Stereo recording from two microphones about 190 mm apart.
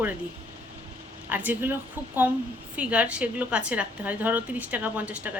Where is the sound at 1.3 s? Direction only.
10° right (ahead or behind).